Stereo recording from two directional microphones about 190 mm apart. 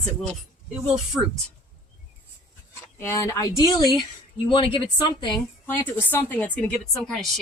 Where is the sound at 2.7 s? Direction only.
15° left (ahead or behind).